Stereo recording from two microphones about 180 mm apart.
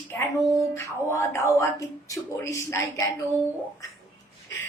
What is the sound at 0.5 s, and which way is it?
A woman's voice, 15° left (ahead or behind).